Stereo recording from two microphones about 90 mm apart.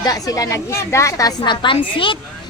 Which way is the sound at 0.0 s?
40° left (ahead or behind).